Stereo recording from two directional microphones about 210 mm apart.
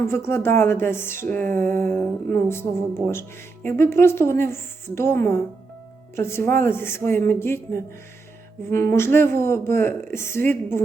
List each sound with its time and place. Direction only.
0.1 s speech: 10° left (ahead or behind)